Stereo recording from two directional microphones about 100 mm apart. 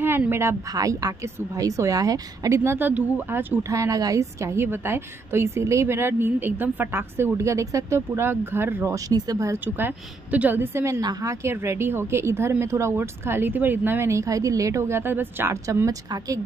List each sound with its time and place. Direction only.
0.3 s a woman's voice: 30° right (ahead or behind)
3.7 s a woman's voice: 35° right (ahead or behind)
8.9 s a woman's voice: 35° right (ahead or behind)
9.8 s a woman's voice: 20° right (ahead or behind)
11.0 s a woman's voice: 40° right (ahead or behind)